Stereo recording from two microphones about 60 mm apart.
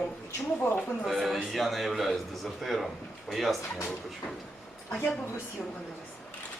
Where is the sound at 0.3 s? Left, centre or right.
Left.